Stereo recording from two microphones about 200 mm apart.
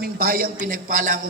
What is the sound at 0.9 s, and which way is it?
Speech, 40° right (ahead or behind).